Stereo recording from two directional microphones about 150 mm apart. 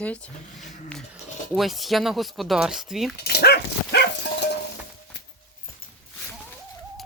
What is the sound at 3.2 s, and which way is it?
Dog, 90° left.